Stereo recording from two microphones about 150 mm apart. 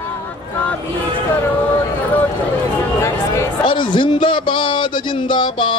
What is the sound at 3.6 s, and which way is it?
A man's voice, 30° left (ahead or behind).